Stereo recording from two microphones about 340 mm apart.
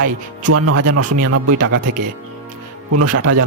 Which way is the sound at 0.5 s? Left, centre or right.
Right.